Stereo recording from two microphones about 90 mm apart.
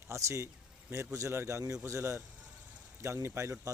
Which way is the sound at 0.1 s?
35° right (ahead or behind).